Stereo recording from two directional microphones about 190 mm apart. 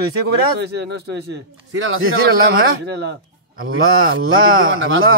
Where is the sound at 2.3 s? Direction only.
55° right (ahead or behind).